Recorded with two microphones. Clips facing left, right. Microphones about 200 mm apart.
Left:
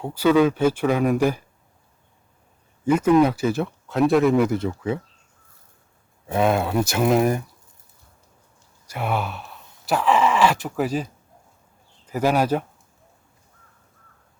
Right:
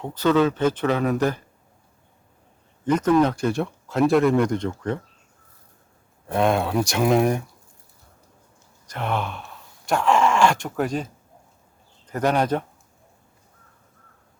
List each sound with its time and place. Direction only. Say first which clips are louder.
0.0 s speech: left 2 dB; 10° left (ahead or behind)
2.8 s speech: left 2 dB; 10° left (ahead or behind)
6.2 s speech: even; 5° left (ahead or behind)
8.9 s speech: left 1 dB; 10° left (ahead or behind)